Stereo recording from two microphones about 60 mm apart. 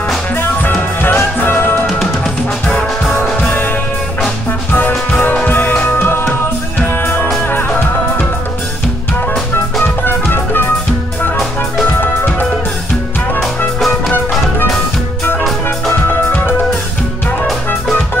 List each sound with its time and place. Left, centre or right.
0.4 s music: left
1.9 s music: centre
2.6 s music: centre
3.4 s music: left
5.5 s music: left
10.0 s music: left
12.0 s music: left
13.7 s music: centre
15.9 s music: left